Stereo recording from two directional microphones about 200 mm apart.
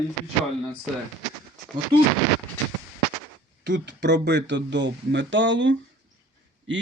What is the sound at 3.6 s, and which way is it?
Speech, 60° right (ahead or behind).